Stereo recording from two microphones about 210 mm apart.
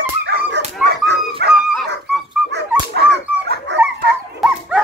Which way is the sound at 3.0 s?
55° right (ahead or behind).